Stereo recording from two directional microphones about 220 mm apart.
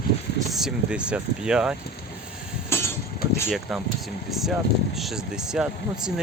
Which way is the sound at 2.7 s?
10° left (ahead or behind).